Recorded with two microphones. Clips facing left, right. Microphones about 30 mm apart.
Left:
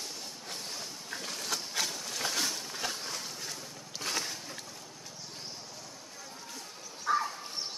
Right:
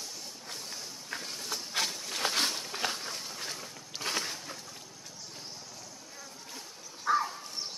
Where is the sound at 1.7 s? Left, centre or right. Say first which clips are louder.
Right 1 dB; right.